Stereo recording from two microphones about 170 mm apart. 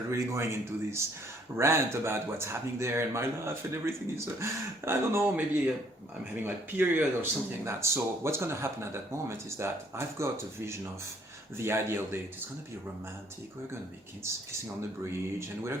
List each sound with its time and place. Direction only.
0.1 s speech: 15° right (ahead or behind)
14.3 s speech: 15° right (ahead or behind)